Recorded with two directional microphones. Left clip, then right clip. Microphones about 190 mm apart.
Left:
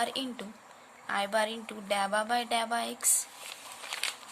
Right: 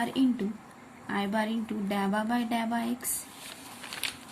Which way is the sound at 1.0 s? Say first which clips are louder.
Left 2 dB; 30° left (ahead or behind).